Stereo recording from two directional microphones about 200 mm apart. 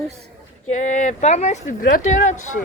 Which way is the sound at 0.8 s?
40° left (ahead or behind).